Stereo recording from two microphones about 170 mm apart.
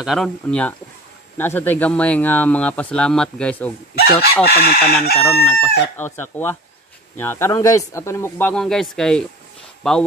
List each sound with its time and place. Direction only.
0.0 s speech: centre (ahead or behind)
4.0 s chicken: 65° left (ahead or behind)
5.3 s speech: 10° left (ahead or behind)